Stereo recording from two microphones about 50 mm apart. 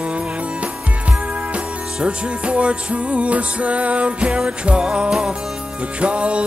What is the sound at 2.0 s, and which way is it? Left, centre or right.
Music, right.